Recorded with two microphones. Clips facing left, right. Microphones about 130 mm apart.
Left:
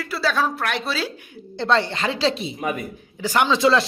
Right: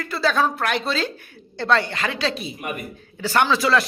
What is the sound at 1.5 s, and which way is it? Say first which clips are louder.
Speech: even; 25° left (ahead or behind).